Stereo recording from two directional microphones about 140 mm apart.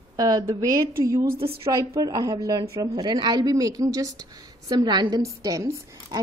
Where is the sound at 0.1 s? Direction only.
25° right (ahead or behind).